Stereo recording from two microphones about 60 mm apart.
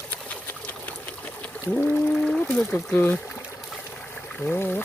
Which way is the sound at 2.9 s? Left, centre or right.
Left.